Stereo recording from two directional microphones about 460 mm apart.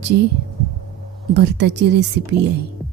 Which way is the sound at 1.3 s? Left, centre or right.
Right.